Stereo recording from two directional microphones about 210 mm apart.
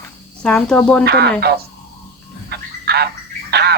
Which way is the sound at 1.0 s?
50° right (ahead or behind).